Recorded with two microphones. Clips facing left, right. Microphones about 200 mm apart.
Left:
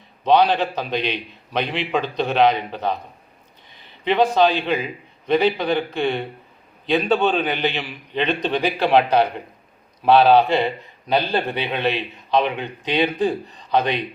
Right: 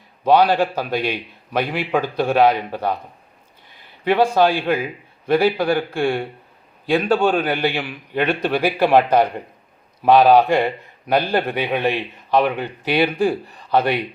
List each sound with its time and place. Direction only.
0.3 s a man's voice: 10° right (ahead or behind)
4.0 s a man's voice: 10° right (ahead or behind)
13.7 s speech: 20° left (ahead or behind)